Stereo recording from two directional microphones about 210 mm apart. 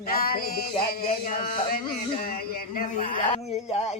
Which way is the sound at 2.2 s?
45° left (ahead or behind).